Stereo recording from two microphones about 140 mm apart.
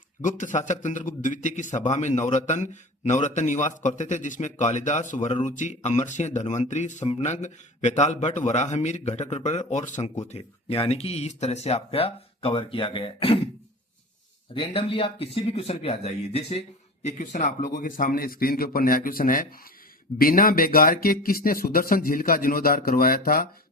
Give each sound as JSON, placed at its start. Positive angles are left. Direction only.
{"t": 0.2, "sound": "a man's voice", "side_deg": 65}
{"t": 10.2, "sound": "speech", "side_deg": 45}
{"t": 14.5, "sound": "a man's voice", "side_deg": 40}